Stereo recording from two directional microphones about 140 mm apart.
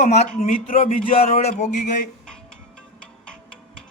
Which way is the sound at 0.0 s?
50° left (ahead or behind).